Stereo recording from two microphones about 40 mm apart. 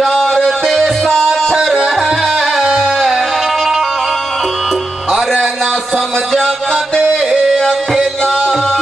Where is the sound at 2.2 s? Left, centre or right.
Centre.